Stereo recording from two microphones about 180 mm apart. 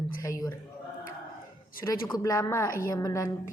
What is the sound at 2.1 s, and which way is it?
Speech, 20° left (ahead or behind).